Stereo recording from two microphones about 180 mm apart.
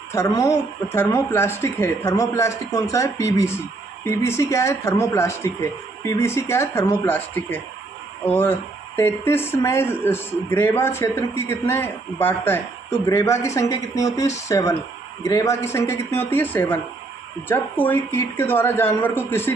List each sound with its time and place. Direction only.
0.1 s speech: 15° left (ahead or behind)